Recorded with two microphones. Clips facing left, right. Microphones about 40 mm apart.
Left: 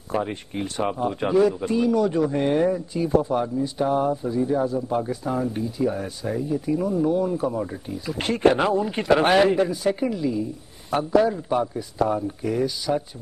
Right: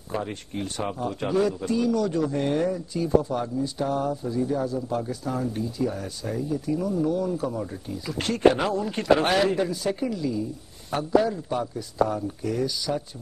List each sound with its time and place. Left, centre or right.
0.1 s speech: centre